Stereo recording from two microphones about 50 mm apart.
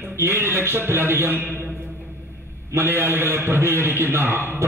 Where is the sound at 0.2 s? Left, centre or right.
Right.